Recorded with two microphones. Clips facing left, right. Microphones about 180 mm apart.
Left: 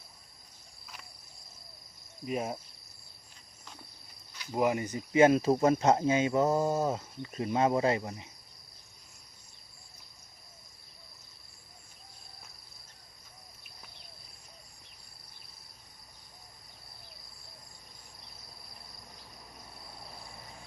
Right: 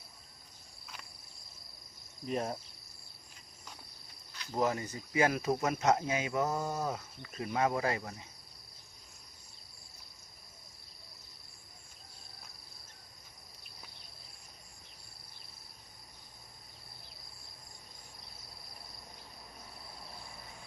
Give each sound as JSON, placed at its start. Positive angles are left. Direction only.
{"t": 2.2, "sound": "cricket", "side_deg": 5}
{"t": 4.5, "sound": "speech", "side_deg": 15}